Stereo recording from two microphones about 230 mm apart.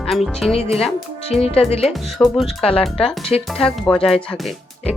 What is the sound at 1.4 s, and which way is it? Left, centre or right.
Speech, left.